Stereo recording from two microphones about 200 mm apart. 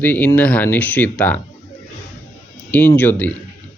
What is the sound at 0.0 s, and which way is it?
A man's voice, 10° left (ahead or behind).